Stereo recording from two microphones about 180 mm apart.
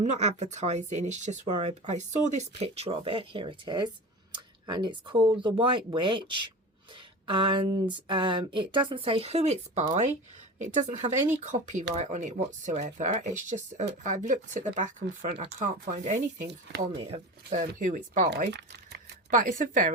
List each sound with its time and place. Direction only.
0.0 s speech: 40° right (ahead or behind)
17.0 s speech: 35° right (ahead or behind)
17.6 s speech: 45° right (ahead or behind)
18.5 s a sound: 65° right (ahead or behind)
19.3 s speech: 45° right (ahead or behind)